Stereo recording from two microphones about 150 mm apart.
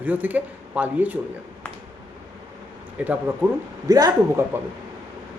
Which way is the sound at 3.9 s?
25° right (ahead or behind).